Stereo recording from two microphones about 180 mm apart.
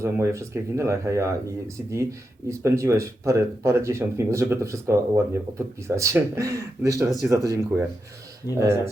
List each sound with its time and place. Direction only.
0.0 s speech: 15° right (ahead or behind)